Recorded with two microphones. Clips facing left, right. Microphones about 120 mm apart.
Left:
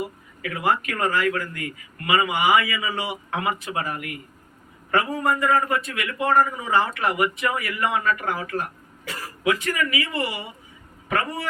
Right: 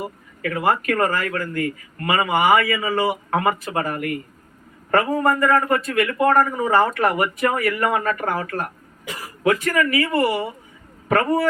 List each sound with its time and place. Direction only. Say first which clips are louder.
0.4 s a man's voice: right 3 dB; 50° right (ahead or behind)